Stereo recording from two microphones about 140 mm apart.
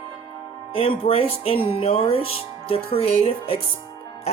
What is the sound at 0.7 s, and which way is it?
Speech, 40° left (ahead or behind).